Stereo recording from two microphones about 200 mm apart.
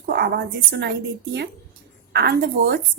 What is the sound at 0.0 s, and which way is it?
A woman's voice, 55° right (ahead or behind).